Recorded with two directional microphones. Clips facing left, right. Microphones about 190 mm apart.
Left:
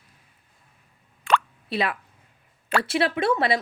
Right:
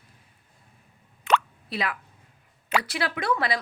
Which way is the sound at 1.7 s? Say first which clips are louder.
Left 4 dB; 25° left (ahead or behind).